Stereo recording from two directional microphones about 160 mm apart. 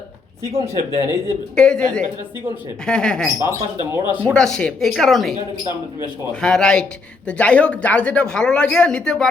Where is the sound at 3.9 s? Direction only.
10° right (ahead or behind).